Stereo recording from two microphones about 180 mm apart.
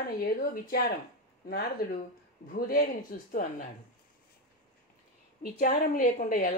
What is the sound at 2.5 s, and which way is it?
Speech, 55° left (ahead or behind).